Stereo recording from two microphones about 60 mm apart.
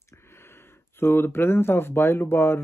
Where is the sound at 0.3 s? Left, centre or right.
Left.